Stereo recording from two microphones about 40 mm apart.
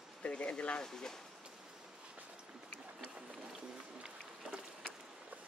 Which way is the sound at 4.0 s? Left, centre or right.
Right.